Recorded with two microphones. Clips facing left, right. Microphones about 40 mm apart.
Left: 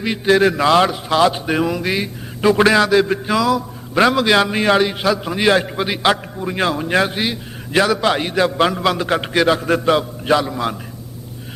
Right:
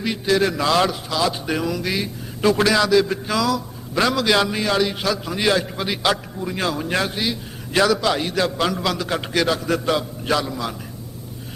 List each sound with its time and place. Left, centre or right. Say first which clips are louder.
0.3 s a man's voice: left 6 dB; left
1.0 s a man's voice: left 7 dB; left